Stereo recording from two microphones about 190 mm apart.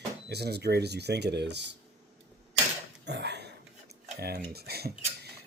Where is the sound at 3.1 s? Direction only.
65° right (ahead or behind).